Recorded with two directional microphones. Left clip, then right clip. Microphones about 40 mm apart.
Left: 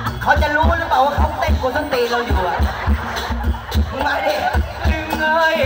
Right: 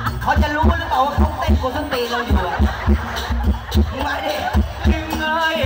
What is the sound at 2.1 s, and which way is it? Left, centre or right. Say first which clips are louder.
Speech: left 2 dB; right.